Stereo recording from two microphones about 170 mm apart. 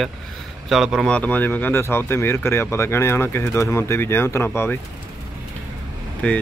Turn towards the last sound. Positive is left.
turn(degrees=10)  # may be behind; listen again after turning